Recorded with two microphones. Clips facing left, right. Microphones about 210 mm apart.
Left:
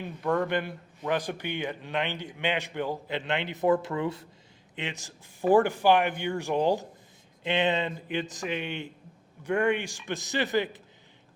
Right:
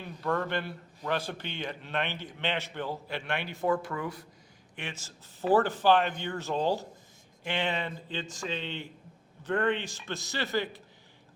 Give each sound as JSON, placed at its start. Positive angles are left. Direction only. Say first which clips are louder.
{"t": 0.0, "sound": "a man's voice", "louder": "left 4 dB", "side_deg": 15}